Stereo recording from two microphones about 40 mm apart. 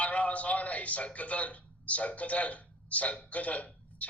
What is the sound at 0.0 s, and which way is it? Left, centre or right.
A man's voice, left.